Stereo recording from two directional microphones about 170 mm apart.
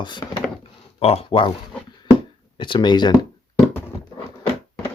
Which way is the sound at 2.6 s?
25° left (ahead or behind).